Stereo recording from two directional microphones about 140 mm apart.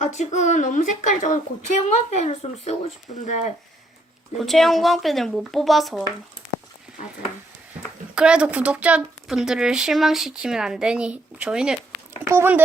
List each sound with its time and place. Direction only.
0.0 s a woman's voice: 60° left (ahead or behind)
4.4 s speech: centre (ahead or behind)
8.1 s a child's voice: 5° right (ahead or behind)